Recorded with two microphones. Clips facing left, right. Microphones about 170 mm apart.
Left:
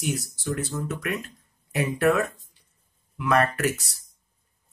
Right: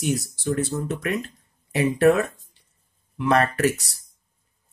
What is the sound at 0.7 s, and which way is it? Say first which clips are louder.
Speech: right 3 dB; 25° right (ahead or behind).